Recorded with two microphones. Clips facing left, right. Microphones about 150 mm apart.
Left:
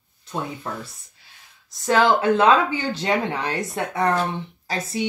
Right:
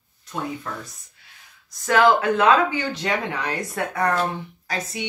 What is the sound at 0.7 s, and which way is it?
Speech, 25° left (ahead or behind).